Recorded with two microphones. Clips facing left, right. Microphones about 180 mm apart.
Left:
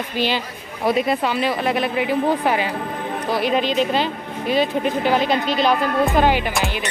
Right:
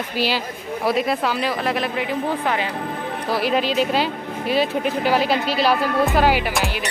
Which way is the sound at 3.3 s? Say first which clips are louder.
Left 1 dB; 5° right (ahead or behind).